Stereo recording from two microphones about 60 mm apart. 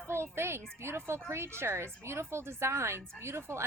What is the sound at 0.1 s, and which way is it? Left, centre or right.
A woman's voice, right.